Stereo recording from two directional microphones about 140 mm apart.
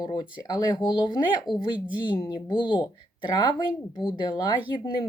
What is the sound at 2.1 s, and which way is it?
A woman's voice, 30° left (ahead or behind).